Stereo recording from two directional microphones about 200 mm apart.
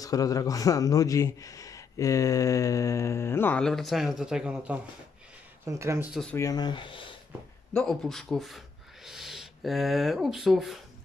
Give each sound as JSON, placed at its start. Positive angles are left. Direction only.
{"t": 0.0, "sound": "a man's voice", "side_deg": 15}
{"t": 6.3, "sound": "speech", "side_deg": 15}
{"t": 7.7, "sound": "speech", "side_deg": 0}